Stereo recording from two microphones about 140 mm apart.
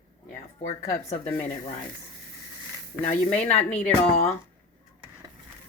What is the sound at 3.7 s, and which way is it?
Speech, 10° left (ahead or behind).